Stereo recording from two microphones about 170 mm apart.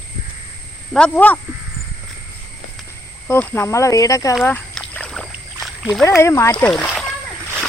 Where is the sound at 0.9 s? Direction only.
5° left (ahead or behind).